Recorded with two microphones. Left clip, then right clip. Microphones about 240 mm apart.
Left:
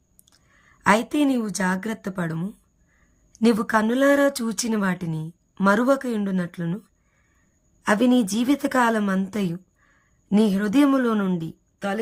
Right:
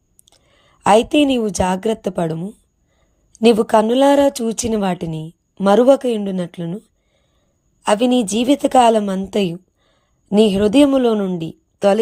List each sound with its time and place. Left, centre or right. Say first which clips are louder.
0.3 s a sound: right 4 dB; centre
0.9 s speech: right 7 dB; centre
8.4 s a woman's voice: right 10 dB; centre
11.8 s speech: right 14 dB; centre